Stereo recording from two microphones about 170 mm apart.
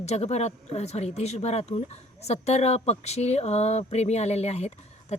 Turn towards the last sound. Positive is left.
turn(degrees=40)  # may be behind; listen again after turning